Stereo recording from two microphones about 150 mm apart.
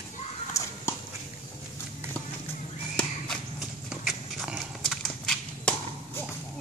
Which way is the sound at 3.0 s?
Centre (ahead or behind).